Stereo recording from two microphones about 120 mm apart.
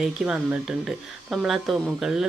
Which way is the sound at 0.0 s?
5° right (ahead or behind).